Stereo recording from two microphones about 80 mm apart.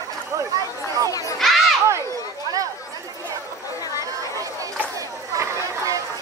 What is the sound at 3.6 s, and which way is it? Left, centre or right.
Chatter, left.